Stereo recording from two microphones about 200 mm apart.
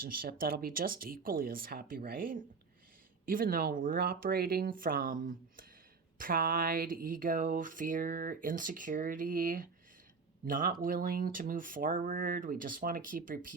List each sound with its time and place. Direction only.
0.0 s speech: 45° right (ahead or behind)